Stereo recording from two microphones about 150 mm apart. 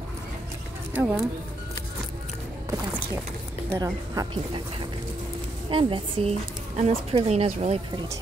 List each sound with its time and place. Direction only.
0.9 s speech: 10° right (ahead or behind)
3.7 s a woman's voice: 25° right (ahead or behind)
5.7 s speech: 35° right (ahead or behind)